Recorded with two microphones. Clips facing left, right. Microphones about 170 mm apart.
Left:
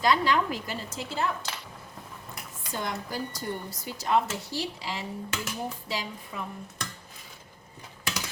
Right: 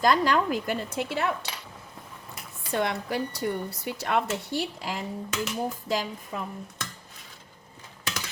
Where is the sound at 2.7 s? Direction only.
70° right (ahead or behind); by 5.0 s 55° right (ahead or behind).